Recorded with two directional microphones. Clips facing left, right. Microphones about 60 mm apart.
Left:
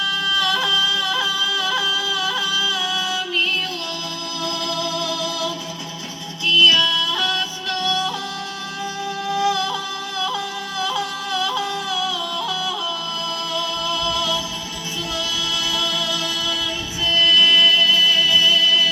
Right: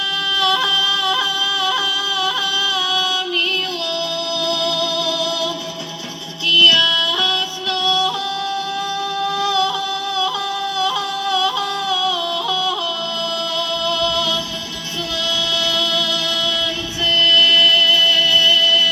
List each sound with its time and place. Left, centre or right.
0.3 s a sound: left
4.4 s music: left
6.5 s music: left
9.3 s music: left
10.8 s yodeling: left
13.6 s music: centre
15.5 s music: centre